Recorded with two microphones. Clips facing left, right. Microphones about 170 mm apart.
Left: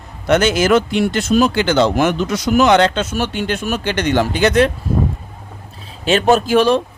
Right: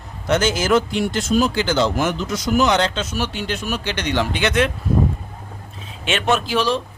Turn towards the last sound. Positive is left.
turn(degrees=55)  # may be behind; listen again after turning